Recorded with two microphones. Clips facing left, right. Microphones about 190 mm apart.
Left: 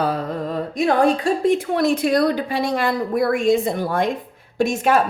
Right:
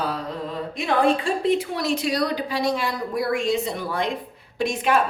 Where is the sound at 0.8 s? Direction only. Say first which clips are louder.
Left 3 dB; 40° left (ahead or behind).